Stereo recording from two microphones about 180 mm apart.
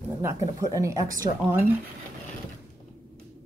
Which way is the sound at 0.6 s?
15° right (ahead or behind).